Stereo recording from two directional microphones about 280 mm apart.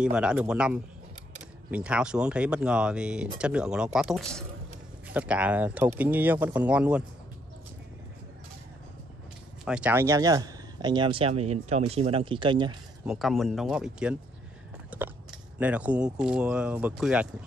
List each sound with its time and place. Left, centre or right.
0.0 s speech: centre
9.7 s speech: centre
13.0 s speech: centre
14.9 s biting: centre
15.6 s speech: centre